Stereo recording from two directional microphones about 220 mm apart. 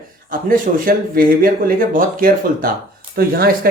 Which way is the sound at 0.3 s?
40° right (ahead or behind).